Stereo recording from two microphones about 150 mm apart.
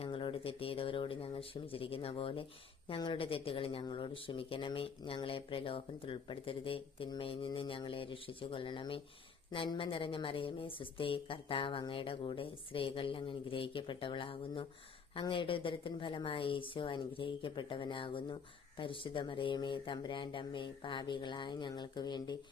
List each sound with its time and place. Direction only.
0.0 s speech: 35° left (ahead or behind)